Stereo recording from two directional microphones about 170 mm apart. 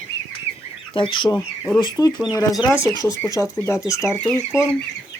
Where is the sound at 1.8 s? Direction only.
25° left (ahead or behind).